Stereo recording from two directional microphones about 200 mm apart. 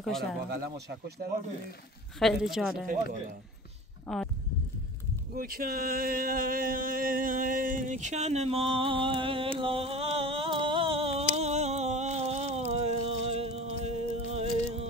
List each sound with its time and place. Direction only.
0.0 s a woman's voice: centre (ahead or behind)
2.1 s a woman's voice: centre (ahead or behind)
2.9 s a man's voice: 40° right (ahead or behind)
4.1 s a woman's voice: centre (ahead or behind)
5.3 s a sound: 45° right (ahead or behind); by 14.5 s 30° right (ahead or behind)